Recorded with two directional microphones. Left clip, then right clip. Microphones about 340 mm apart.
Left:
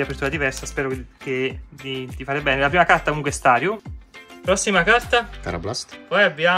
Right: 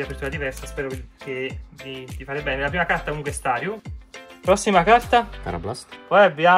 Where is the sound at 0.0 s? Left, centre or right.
Centre.